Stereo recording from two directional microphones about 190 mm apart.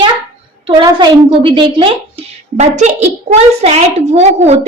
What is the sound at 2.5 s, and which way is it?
A woman's voice, 40° right (ahead or behind).